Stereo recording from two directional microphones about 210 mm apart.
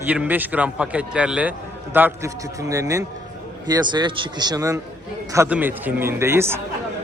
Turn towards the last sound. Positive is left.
turn(degrees=-10)  # may be behind; listen again after turning